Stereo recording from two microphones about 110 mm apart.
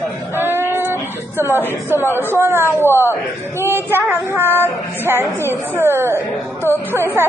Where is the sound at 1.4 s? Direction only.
20° right (ahead or behind).